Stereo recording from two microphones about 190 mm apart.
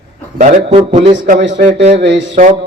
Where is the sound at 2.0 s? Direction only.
65° right (ahead or behind).